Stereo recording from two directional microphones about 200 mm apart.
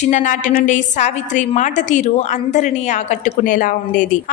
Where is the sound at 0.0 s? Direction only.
40° left (ahead or behind).